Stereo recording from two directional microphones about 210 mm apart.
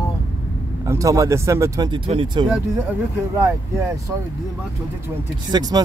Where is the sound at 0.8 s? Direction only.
15° right (ahead or behind).